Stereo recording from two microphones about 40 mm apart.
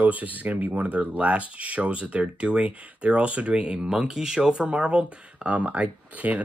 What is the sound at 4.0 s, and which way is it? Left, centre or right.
Speech, centre.